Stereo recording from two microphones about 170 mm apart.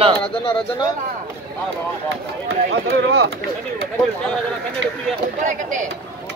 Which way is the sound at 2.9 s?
80° right.